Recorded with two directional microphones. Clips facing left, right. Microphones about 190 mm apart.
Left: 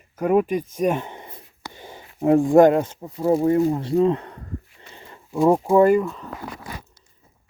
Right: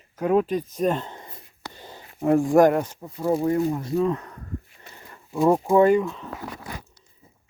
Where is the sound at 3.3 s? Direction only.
30° left (ahead or behind).